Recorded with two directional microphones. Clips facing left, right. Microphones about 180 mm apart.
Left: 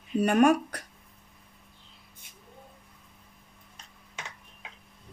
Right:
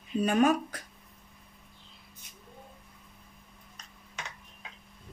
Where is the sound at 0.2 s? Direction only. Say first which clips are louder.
Left 3 dB; 70° left (ahead or behind).